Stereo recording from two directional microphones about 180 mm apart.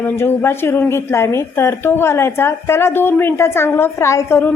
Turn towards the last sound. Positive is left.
turn(degrees=15)  # may be behind; listen again after turning